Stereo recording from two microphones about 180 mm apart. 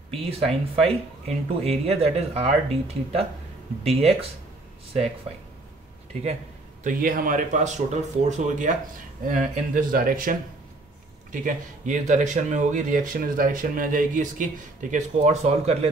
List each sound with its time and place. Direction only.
0.4 s speech: 35° right (ahead or behind)
6.8 s speech: 50° right (ahead or behind)
11.3 s speech: 45° right (ahead or behind)